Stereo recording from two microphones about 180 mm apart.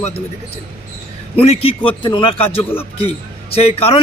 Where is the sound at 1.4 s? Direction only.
35° left (ahead or behind).